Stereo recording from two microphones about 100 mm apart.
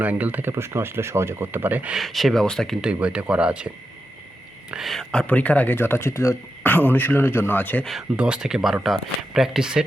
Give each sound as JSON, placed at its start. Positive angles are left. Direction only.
{"t": 0.0, "sound": "speech", "side_deg": -15}
{"t": 2.0, "sound": "speech", "side_deg": 0}
{"t": 2.8, "sound": "speech", "side_deg": -10}
{"t": 4.7, "sound": "speech", "side_deg": 0}
{"t": 5.2, "sound": "speech", "side_deg": 15}
{"t": 7.9, "sound": "speech", "side_deg": -5}